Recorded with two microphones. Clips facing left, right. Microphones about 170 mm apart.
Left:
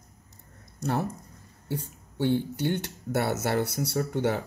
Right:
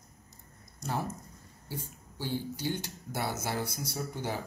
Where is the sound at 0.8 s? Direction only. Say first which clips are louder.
Left 6 dB; 65° left (ahead or behind).